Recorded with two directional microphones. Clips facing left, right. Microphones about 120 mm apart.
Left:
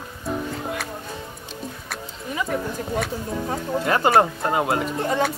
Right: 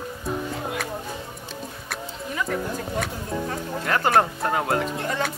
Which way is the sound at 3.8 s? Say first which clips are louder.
Left 2 dB; 15° left (ahead or behind).